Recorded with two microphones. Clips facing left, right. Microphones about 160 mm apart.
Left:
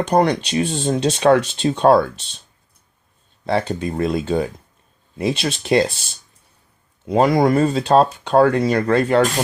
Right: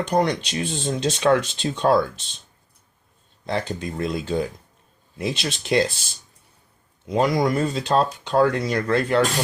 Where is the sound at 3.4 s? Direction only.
65° left (ahead or behind).